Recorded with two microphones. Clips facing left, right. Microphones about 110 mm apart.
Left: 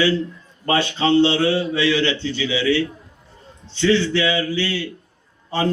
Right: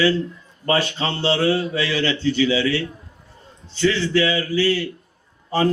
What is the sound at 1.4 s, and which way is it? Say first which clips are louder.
Speech: left 2 dB; 35° right (ahead or behind).